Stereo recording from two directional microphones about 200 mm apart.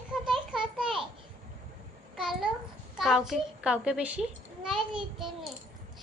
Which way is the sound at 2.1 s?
Centre (ahead or behind).